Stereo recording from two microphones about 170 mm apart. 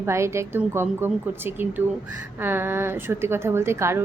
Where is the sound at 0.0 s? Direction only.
15° right (ahead or behind).